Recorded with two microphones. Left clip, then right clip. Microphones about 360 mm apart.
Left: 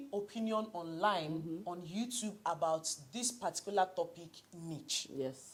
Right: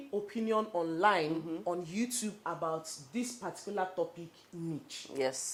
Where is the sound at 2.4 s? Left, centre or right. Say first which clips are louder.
Left 2 dB; left.